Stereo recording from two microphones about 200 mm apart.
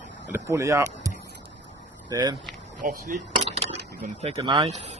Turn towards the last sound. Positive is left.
turn(degrees=-20)  # may be behind; listen again after turning